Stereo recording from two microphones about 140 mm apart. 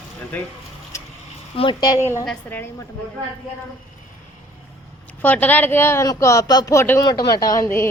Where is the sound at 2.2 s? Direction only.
10° left (ahead or behind).